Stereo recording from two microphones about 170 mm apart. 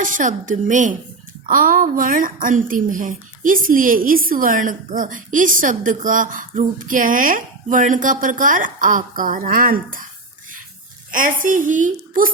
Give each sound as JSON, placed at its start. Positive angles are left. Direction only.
{"t": 0.0, "sound": "a woman's voice", "side_deg": -50}
{"t": 11.1, "sound": "a woman's voice", "side_deg": -50}